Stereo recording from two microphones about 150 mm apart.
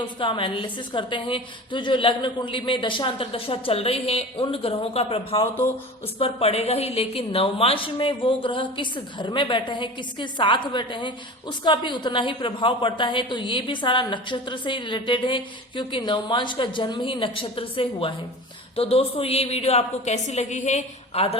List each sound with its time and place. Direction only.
0.2 s a woman's voice: 35° left (ahead or behind)